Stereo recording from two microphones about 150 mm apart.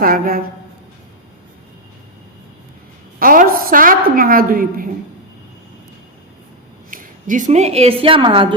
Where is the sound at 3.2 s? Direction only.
70° right (ahead or behind).